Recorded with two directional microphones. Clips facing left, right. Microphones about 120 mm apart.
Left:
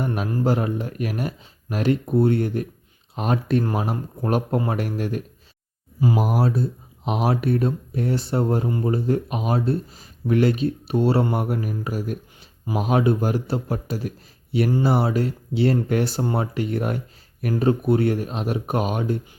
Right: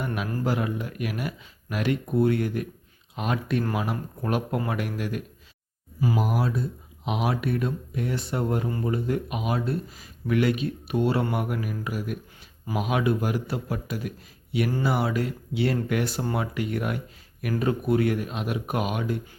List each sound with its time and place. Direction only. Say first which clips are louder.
0.0 s speech: left 5 dB; 35° left (ahead or behind)